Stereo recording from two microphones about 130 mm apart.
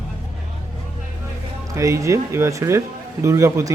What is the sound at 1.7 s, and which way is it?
Speech, 25° right (ahead or behind).